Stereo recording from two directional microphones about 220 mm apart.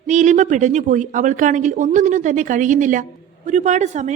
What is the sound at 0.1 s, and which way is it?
A woman's voice, 35° right (ahead or behind).